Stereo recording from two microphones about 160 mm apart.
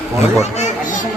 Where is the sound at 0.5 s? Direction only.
50° left (ahead or behind).